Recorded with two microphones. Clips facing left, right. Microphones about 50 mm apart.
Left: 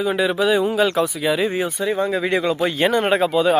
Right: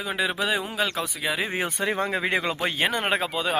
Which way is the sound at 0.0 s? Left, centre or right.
Centre.